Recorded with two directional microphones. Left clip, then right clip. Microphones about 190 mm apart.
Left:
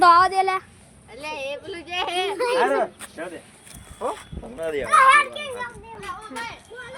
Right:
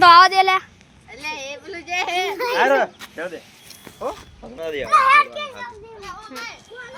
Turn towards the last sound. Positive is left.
turn(degrees=5)  # may be behind; listen again after turning